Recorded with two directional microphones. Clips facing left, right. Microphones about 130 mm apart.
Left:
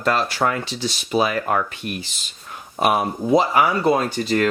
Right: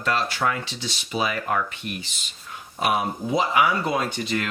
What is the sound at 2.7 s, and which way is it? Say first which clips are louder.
Speech: left 4 dB; 50° left (ahead or behind).